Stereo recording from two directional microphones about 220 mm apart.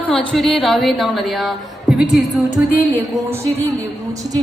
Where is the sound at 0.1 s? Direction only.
5° left (ahead or behind).